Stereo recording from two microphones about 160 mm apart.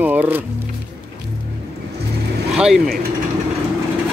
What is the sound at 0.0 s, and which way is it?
Speech, 10° right (ahead or behind).